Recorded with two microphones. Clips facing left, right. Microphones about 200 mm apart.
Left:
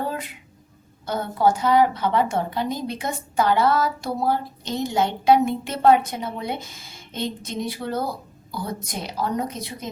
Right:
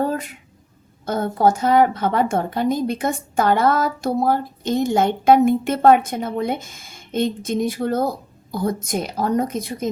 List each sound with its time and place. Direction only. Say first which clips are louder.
1.0 s a woman's voice: right 3 dB; 50° right (ahead or behind)